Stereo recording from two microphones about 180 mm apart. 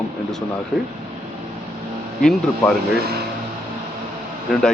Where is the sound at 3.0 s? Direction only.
60° right (ahead or behind).